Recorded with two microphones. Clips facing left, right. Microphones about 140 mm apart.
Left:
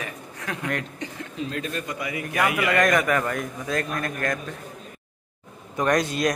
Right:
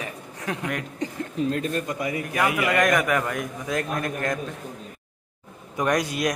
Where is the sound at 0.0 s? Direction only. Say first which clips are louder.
Right 2 dB; 25° right (ahead or behind).